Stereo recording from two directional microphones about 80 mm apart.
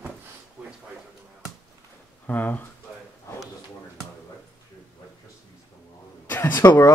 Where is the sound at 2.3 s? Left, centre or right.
Left.